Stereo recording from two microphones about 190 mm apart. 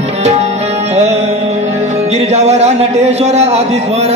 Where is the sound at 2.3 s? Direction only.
35° right (ahead or behind).